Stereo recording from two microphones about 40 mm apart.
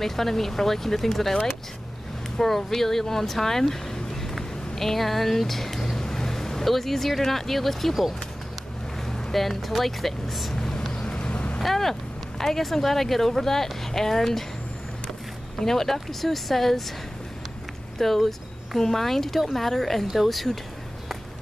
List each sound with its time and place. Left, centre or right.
0.0 s speech: centre
9.3 s speech: centre
10.5 s vehicle: centre
11.6 s speech: centre
15.6 s speech: centre
17.9 s speech: centre